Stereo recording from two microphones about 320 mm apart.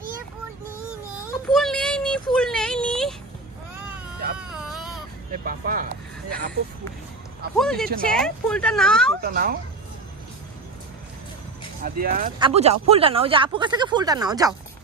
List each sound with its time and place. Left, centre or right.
1.2 s speech: centre
2.3 s a sound: centre
4.4 s baby cry: centre
5.4 s speech: right
7.5 s a woman's voice: centre
9.2 s speech: right
11.8 s speech: right; by 14.5 s centre